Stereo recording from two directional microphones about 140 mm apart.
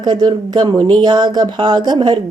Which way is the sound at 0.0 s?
30° right (ahead or behind).